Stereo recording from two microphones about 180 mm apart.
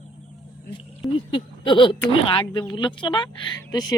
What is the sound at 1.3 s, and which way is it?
A woman's voice, 30° left (ahead or behind).